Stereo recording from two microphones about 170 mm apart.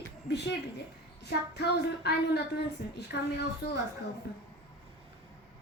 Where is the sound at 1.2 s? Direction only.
80° left.